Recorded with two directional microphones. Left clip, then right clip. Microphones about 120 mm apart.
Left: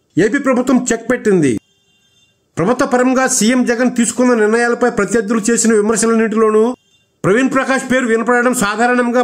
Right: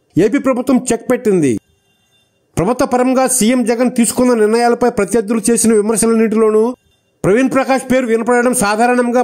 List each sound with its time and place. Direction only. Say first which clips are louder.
0.1 s a man's voice: even; 45° right (ahead or behind)
2.5 s a man's voice: even; 40° right (ahead or behind)